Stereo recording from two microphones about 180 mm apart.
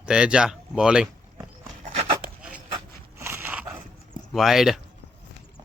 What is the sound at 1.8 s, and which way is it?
Dog, 45° right (ahead or behind).